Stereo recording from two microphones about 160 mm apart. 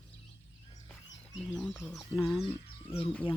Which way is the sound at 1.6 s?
5° left (ahead or behind).